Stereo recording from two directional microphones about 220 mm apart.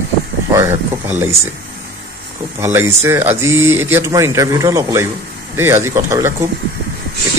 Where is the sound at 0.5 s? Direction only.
10° right (ahead or behind).